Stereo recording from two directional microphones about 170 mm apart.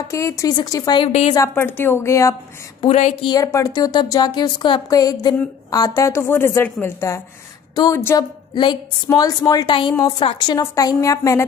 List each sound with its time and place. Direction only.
0.1 s a woman's voice: 20° left (ahead or behind)
1.3 s a woman's voice: 15° left (ahead or behind)
2.8 s speech: 40° left (ahead or behind)
3.3 s a woman's voice: 20° left (ahead or behind)